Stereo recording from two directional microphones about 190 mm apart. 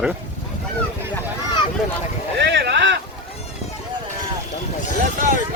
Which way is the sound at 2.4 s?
65° right (ahead or behind).